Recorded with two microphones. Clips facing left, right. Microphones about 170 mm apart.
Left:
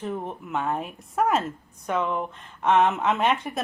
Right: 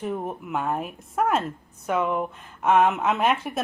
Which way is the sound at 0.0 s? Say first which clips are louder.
Right 2 dB; 10° right (ahead or behind).